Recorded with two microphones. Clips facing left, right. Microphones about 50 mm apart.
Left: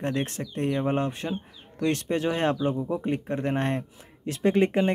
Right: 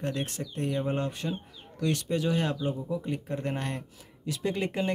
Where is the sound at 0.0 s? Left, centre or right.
Left.